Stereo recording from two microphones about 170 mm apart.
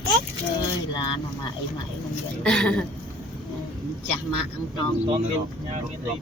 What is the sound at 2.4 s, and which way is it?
Speech, 5° left (ahead or behind).